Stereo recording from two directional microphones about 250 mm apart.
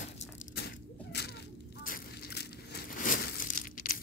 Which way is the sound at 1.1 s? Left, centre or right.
Left.